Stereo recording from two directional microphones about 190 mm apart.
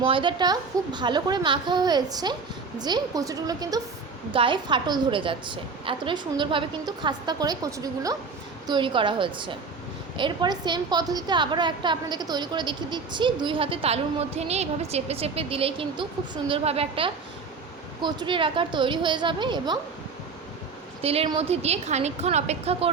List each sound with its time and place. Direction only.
0.0 s a woman's voice: 25° right (ahead or behind)
21.0 s a woman's voice: 30° right (ahead or behind)